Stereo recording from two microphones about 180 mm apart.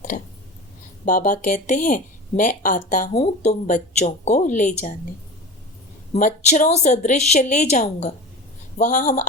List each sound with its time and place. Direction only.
0.1 s speech: 50° left (ahead or behind)
6.1 s a woman's voice: 45° left (ahead or behind)